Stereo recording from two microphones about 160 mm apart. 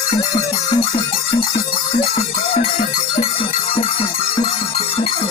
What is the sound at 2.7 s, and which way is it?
Cowbell, 40° left (ahead or behind).